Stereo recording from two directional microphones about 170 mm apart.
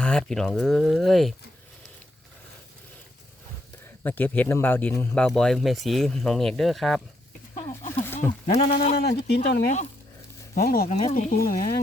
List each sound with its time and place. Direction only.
0.0 s speech: 5° left (ahead or behind)
4.0 s speech: 10° left (ahead or behind)
8.2 s speech: 10° left (ahead or behind)
8.5 s speech: 40° left (ahead or behind)
9.0 s speech: 70° left (ahead or behind)
10.5 s speech: 60° left (ahead or behind)
10.8 s speech: 40° left (ahead or behind)
11.1 s speech: 55° left (ahead or behind)